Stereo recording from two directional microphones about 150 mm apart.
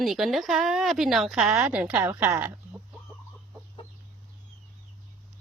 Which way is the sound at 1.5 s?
20° right (ahead or behind).